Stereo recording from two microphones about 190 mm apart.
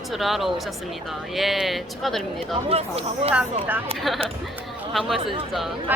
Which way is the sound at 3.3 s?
10° right (ahead or behind).